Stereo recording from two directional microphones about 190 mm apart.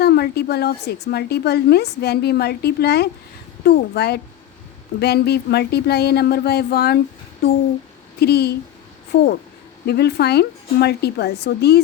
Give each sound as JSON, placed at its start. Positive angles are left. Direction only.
{"t": 0.0, "sound": "a woman's voice", "side_deg": 55}
{"t": 8.2, "sound": "a woman's voice", "side_deg": 60}